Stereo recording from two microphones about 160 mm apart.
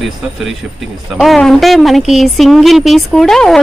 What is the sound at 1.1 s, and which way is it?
Speech, centre (ahead or behind).